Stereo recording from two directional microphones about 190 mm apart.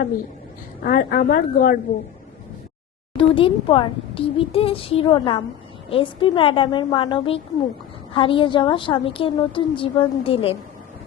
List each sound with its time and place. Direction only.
0.9 s a woman's voice: 50° left (ahead or behind)
3.2 s a woman's voice: 30° left (ahead or behind)